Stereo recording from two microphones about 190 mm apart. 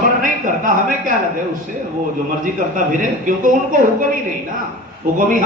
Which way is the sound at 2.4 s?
45° right (ahead or behind).